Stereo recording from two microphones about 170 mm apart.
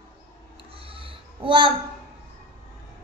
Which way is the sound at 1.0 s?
30° right (ahead or behind).